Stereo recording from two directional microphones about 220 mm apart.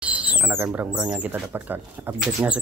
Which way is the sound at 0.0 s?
5° right (ahead or behind).